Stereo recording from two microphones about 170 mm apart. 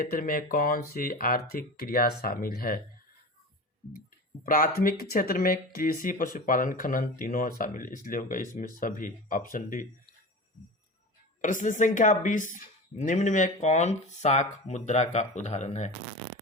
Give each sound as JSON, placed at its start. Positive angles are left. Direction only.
{"t": 0.0, "sound": "speech", "side_deg": 55}
{"t": 4.4, "sound": "speech", "side_deg": 55}
{"t": 11.4, "sound": "speech", "side_deg": 50}